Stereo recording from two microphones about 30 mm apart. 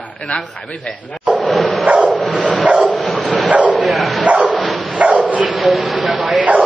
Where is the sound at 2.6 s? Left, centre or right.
Right.